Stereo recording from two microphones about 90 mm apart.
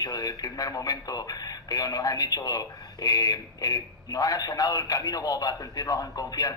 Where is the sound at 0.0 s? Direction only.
45° left (ahead or behind).